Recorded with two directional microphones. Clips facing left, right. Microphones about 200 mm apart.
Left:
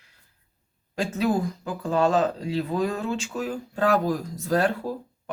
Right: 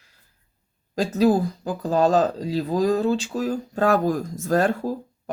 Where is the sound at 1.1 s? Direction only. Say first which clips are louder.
Right 6 dB; 35° right (ahead or behind).